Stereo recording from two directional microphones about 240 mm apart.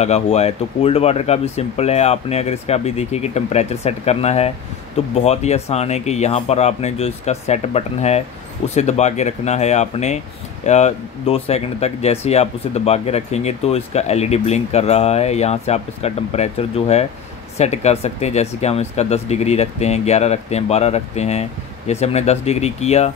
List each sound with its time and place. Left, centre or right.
0.0 s speech: left